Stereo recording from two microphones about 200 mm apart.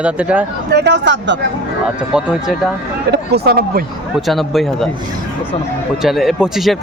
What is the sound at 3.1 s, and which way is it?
Speech, 55° right (ahead or behind).